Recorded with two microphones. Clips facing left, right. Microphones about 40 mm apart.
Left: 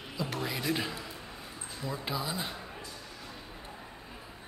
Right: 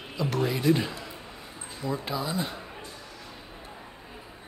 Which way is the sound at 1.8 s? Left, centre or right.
Centre.